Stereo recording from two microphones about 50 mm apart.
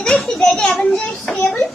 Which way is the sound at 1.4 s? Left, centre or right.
Centre.